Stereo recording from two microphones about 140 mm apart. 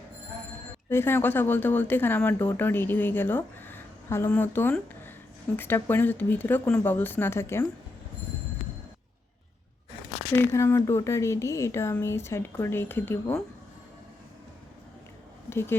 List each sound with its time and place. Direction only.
0.9 s speech: 15° left (ahead or behind)
10.3 s speech: 20° left (ahead or behind)
15.4 s speech: 15° left (ahead or behind)